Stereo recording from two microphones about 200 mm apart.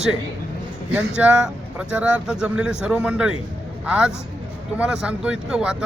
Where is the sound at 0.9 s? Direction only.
5° right (ahead or behind).